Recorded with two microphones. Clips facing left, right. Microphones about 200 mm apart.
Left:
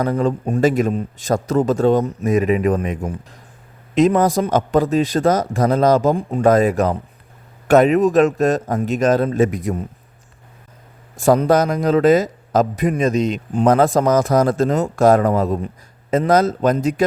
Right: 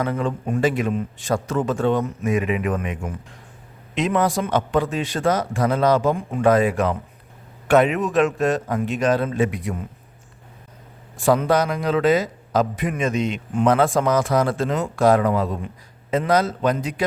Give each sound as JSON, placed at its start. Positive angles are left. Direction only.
{"t": 0.0, "sound": "a man's voice", "side_deg": 40}
{"t": 11.2, "sound": "a man's voice", "side_deg": 45}